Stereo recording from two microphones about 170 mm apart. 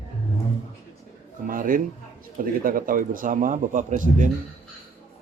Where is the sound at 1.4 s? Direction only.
55° right (ahead or behind).